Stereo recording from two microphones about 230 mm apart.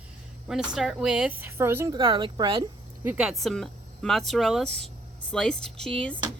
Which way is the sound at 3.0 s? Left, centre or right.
Centre.